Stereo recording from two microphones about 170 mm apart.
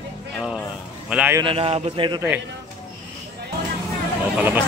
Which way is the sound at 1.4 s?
30° right (ahead or behind).